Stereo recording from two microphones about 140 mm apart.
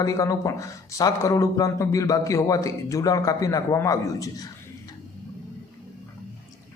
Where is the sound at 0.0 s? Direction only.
25° left (ahead or behind).